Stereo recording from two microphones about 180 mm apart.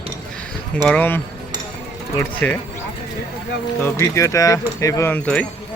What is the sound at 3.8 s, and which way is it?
Speech, 15° left (ahead or behind).